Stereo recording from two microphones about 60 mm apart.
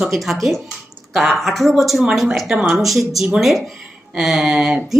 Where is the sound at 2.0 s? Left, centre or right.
Centre.